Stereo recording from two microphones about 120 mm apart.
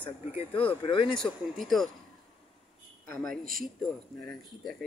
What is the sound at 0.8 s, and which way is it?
Speech, 45° left (ahead or behind).